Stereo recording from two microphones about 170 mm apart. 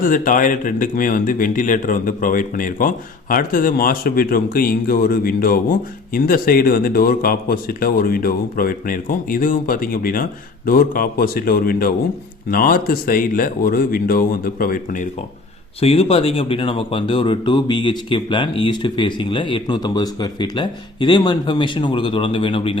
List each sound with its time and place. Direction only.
0.0 s speech: 50° left (ahead or behind)
15.8 s speech: 35° left (ahead or behind)